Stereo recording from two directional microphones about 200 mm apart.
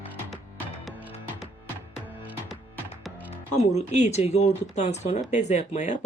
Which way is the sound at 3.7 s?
35° left (ahead or behind).